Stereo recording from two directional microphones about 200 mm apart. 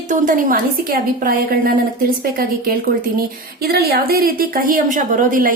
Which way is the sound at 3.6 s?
50° right (ahead or behind).